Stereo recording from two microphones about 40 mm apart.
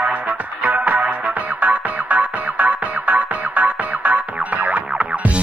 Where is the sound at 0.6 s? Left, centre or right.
Right.